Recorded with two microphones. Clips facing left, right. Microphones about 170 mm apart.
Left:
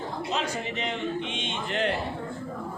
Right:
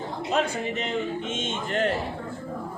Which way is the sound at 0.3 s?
55° right (ahead or behind).